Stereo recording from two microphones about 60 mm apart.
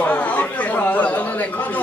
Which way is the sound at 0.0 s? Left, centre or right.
Left.